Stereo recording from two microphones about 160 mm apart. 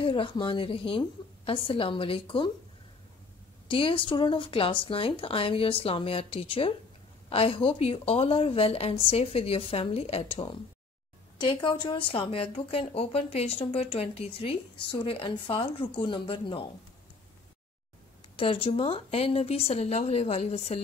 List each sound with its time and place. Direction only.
0.0 s speech: 35° left (ahead or behind)
3.6 s speech: 35° left (ahead or behind)
18.3 s speech: 35° left (ahead or behind)